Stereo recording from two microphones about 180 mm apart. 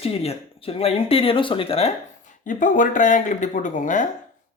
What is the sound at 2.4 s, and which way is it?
Speech, 45° left (ahead or behind).